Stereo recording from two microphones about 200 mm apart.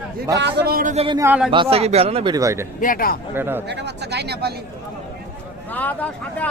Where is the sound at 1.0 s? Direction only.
15° right (ahead or behind).